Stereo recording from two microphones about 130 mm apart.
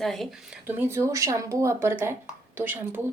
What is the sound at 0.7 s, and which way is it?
Speech, 20° right (ahead or behind).